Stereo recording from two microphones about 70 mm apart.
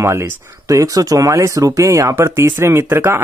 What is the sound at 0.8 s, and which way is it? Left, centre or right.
Speech, right.